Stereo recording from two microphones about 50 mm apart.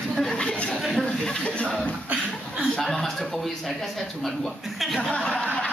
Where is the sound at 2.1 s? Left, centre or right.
Right.